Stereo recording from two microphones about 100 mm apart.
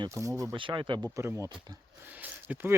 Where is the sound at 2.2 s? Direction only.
15° right (ahead or behind).